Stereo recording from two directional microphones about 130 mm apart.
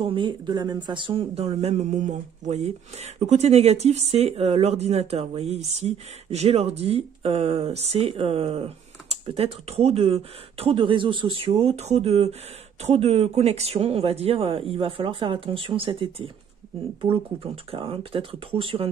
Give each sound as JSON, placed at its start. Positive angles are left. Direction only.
{"t": 0.0, "sound": "speech", "side_deg": -40}